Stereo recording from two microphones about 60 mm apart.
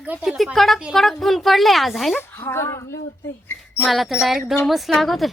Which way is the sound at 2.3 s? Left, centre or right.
Left.